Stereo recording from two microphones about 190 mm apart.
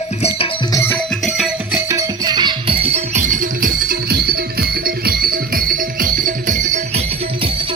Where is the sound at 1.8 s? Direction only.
15° right (ahead or behind); by 7.0 s 40° right (ahead or behind).